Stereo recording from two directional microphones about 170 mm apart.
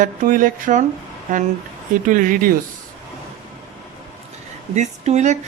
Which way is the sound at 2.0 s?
50° right (ahead or behind).